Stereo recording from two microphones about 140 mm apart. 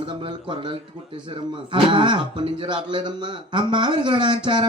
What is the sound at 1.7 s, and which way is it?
Speech, 35° right (ahead or behind).